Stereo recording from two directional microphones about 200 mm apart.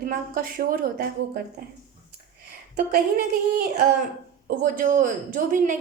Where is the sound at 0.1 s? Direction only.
45° right (ahead or behind).